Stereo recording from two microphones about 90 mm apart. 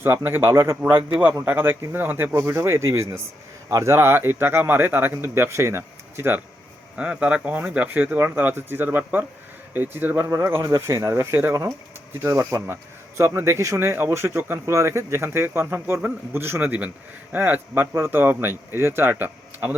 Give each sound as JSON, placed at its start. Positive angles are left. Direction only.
{"t": 0.0, "sound": "speech", "side_deg": -25}
{"t": 1.1, "sound": "speech", "side_deg": -10}
{"t": 1.5, "sound": "speech", "side_deg": -20}
{"t": 3.9, "sound": "speech", "side_deg": -25}
{"t": 6.9, "sound": "speech", "side_deg": -15}
{"t": 10.2, "sound": "speech", "side_deg": -35}